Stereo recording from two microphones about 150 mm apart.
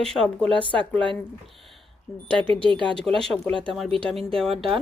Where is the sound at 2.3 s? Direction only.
35° right (ahead or behind).